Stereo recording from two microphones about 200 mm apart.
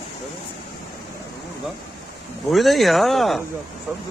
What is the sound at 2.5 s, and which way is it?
Speech, centre (ahead or behind).